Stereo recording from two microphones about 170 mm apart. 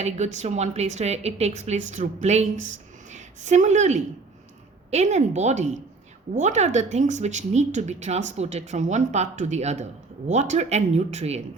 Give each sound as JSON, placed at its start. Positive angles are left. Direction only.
{"t": 0.0, "sound": "a woman's voice", "side_deg": -40}